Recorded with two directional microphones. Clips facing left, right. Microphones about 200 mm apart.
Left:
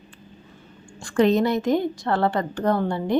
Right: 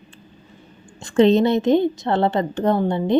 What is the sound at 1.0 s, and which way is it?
A woman's voice, 25° right (ahead or behind).